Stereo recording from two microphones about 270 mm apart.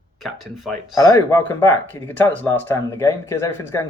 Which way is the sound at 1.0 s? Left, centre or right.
Centre.